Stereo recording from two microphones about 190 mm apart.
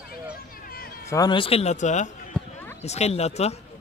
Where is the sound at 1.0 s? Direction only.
20° left (ahead or behind); by 3.5 s 35° left (ahead or behind).